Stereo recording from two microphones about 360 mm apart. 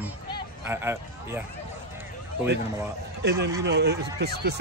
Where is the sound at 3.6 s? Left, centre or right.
Right.